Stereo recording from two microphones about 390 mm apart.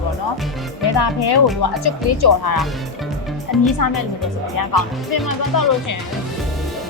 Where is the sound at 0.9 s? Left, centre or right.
Left.